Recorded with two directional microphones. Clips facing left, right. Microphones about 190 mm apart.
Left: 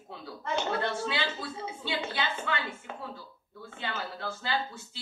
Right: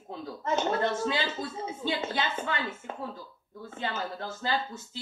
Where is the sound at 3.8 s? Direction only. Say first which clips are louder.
Right 3 dB; 40° right (ahead or behind).